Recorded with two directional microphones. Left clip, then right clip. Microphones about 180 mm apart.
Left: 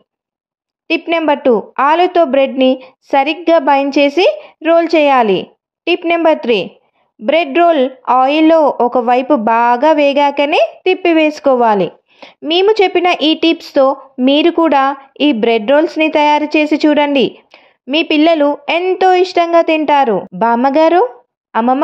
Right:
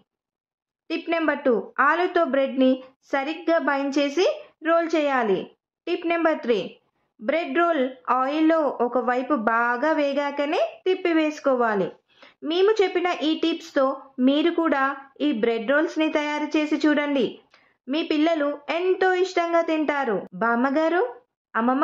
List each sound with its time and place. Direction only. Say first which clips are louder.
0.8 s a woman's voice: left 11 dB; 30° left (ahead or behind)